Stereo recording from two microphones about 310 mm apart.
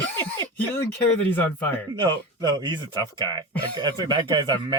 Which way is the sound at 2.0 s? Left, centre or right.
Centre.